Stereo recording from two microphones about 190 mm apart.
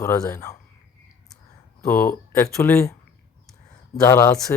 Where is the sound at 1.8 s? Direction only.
5° left (ahead or behind).